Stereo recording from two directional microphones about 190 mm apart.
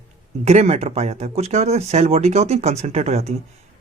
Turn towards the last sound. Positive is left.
turn(degrees=-35)  # may be behind; listen again after turning